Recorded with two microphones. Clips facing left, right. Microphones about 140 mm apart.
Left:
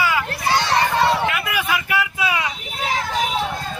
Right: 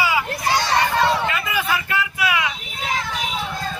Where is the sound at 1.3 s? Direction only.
10° left (ahead or behind).